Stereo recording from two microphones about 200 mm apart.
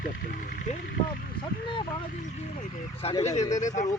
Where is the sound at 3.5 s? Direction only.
40° left (ahead or behind).